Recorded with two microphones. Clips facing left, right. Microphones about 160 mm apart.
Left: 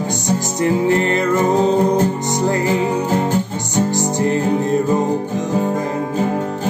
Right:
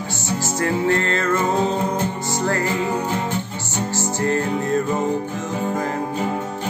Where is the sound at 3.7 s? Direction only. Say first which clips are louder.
Left 6 dB; 15° left (ahead or behind).